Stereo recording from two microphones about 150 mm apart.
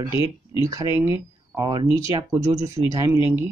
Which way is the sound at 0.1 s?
35° left (ahead or behind).